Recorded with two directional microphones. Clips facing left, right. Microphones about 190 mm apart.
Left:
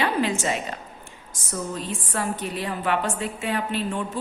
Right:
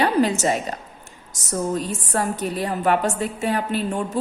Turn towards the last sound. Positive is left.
turn(degrees=-40)  # may be behind; listen again after turning